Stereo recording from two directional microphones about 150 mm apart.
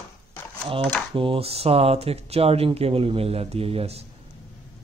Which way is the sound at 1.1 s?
35° right (ahead or behind).